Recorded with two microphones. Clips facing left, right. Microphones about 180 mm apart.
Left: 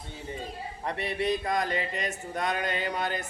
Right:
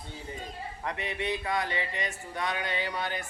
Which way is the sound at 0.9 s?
35° left (ahead or behind).